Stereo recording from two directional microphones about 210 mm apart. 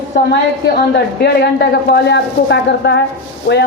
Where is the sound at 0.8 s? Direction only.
50° left (ahead or behind).